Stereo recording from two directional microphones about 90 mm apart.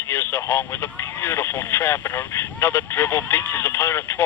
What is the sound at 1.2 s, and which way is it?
Speech, 30° left (ahead or behind).